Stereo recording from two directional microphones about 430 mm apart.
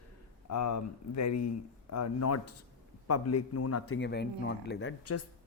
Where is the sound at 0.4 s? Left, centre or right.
Left.